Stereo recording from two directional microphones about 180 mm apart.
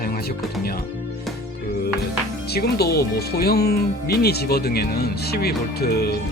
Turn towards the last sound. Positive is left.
turn(degrees=60)  # may be behind; listen again after turning